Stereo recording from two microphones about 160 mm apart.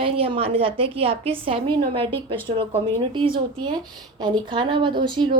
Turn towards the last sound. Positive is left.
turn(degrees=-30)  # may be behind; listen again after turning